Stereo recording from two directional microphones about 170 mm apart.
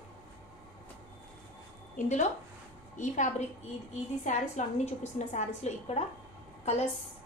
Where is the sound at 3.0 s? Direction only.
45° left (ahead or behind).